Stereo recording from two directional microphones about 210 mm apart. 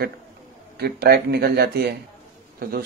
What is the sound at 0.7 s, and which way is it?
Speech, 50° right (ahead or behind).